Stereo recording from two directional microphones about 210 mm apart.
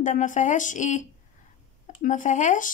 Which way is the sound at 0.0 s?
35° left (ahead or behind).